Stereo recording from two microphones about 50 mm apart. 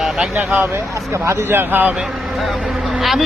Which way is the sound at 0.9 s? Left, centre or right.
Right.